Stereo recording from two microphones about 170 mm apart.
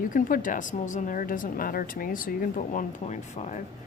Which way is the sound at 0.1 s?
50° left (ahead or behind).